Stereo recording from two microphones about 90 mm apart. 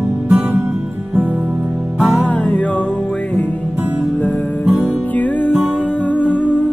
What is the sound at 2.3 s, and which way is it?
Music, 15° left (ahead or behind).